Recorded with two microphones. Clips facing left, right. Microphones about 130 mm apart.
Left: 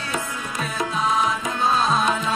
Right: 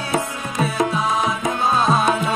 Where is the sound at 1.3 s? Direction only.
15° right (ahead or behind).